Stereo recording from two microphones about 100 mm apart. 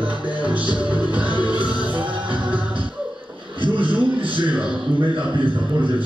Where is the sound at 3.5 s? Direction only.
55° right (ahead or behind).